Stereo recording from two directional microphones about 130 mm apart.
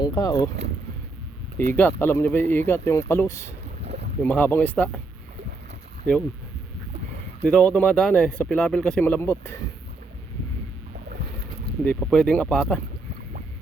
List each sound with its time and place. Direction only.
0.0 s speech: 30° left (ahead or behind)
1.7 s speech: 15° left (ahead or behind)
7.4 s speech: 5° left (ahead or behind)
11.8 s speech: 10° left (ahead or behind)